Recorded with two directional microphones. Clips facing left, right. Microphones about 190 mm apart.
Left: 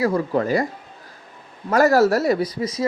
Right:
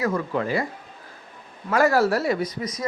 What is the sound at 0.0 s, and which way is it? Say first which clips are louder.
Speech: left 4 dB; 35° left (ahead or behind).